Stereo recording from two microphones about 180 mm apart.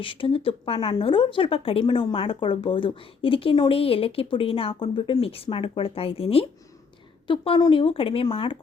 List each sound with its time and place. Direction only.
0.0 s speech: 30° left (ahead or behind)